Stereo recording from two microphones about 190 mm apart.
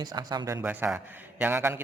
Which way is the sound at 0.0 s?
20° right (ahead or behind).